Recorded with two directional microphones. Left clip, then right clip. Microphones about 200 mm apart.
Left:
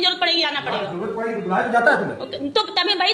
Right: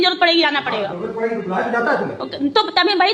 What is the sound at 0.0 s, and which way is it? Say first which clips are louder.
Speech: right 4 dB; 40° right (ahead or behind).